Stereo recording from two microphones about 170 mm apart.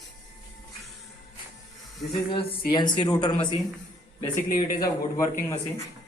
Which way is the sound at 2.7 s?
25° left (ahead or behind).